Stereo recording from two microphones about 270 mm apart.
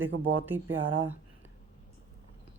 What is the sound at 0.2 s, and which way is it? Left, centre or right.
Speech, centre.